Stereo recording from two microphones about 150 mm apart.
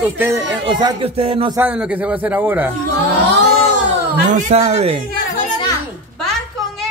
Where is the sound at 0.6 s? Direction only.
30° right (ahead or behind).